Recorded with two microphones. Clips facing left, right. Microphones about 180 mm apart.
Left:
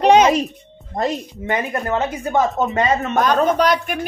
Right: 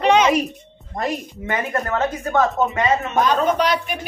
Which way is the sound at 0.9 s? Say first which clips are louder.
Left 3 dB; 20° left (ahead or behind).